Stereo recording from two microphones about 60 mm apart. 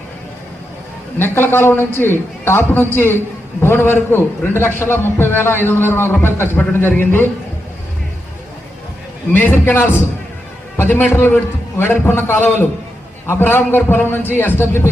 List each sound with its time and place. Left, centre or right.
1.2 s a man's voice: left
9.3 s a man's voice: left